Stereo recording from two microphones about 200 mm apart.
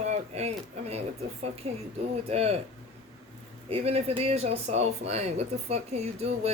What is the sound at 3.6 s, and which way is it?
Speech, 30° right (ahead or behind).